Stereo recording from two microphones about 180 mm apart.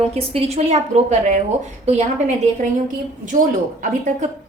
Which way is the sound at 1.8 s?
35° right (ahead or behind).